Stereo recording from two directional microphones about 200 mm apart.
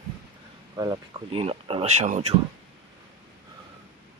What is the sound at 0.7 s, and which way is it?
Speech, 20° right (ahead or behind).